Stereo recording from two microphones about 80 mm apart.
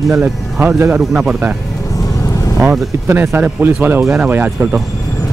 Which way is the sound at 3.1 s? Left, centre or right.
Right.